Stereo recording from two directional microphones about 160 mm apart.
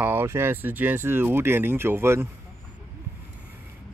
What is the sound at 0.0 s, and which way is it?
Speech, 15° right (ahead or behind).